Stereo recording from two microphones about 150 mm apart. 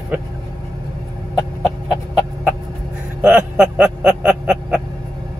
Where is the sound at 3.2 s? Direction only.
10° right (ahead or behind).